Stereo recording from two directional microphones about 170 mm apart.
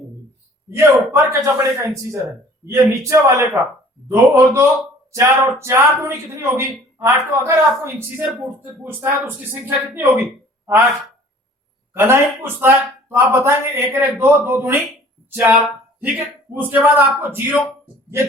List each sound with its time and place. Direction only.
0.8 s speech: 15° right (ahead or behind)
11.9 s speech: 15° right (ahead or behind)